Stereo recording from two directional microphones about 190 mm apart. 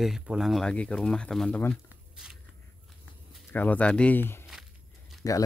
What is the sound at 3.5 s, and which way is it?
Speech, 10° left (ahead or behind).